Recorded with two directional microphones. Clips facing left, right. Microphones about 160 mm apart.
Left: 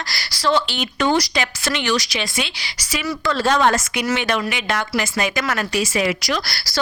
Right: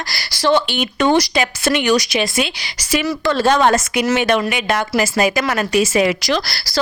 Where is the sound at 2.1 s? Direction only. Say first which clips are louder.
Right 6 dB; 50° right (ahead or behind).